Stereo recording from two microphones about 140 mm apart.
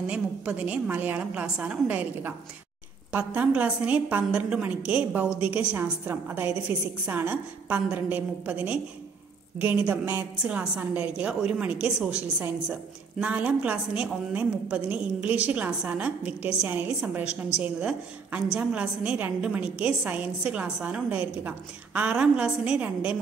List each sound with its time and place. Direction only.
0.0 s a woman's voice: 10° right (ahead or behind)